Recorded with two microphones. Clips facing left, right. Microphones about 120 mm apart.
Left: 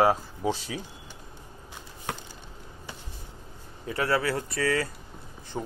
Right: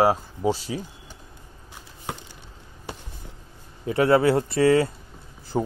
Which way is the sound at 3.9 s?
25° right (ahead or behind).